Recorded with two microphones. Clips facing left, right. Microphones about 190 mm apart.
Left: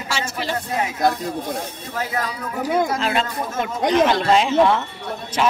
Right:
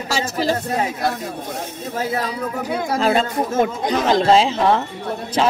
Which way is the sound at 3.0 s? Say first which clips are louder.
Right 5 dB; 35° right (ahead or behind).